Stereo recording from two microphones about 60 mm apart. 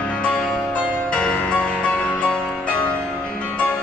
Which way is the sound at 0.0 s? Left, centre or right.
Centre.